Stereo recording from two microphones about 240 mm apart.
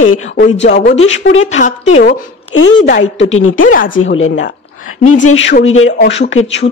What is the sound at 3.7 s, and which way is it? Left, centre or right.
Speech, left.